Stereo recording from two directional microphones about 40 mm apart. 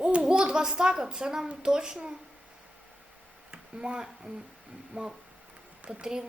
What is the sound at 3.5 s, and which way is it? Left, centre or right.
Speech, right.